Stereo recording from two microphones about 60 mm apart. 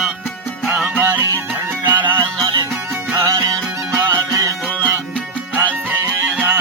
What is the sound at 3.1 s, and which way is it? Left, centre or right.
Music, right.